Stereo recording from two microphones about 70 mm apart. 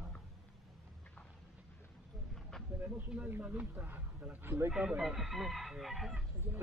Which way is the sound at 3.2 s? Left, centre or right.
Right.